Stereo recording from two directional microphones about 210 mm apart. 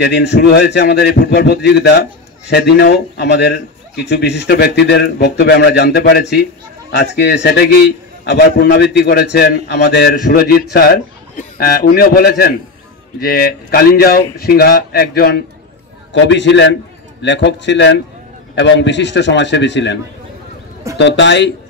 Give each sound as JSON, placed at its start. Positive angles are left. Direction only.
{"t": 0.0, "sound": "a man's voice", "side_deg": 55}
{"t": 21.0, "sound": "a man's voice", "side_deg": 55}